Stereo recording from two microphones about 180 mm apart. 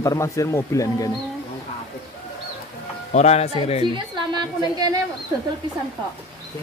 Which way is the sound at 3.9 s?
25° right (ahead or behind).